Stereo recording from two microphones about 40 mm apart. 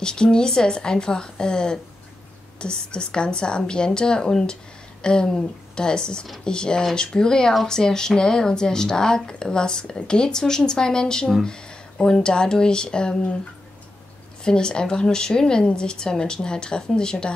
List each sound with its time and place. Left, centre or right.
0.0 s a woman's voice: left
14.4 s a woman's voice: left